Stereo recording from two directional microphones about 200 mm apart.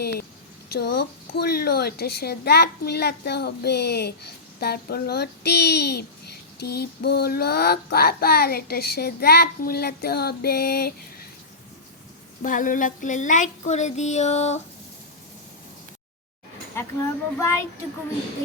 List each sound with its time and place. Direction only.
0.0 s a woman's voice: 55° left (ahead or behind)
12.4 s child singing: 40° left (ahead or behind)
16.8 s speech: 15° left (ahead or behind)